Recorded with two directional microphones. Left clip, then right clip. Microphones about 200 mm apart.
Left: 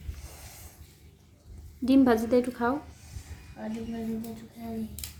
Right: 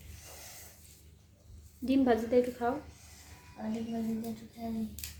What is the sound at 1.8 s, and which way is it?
Speech, 25° left (ahead or behind).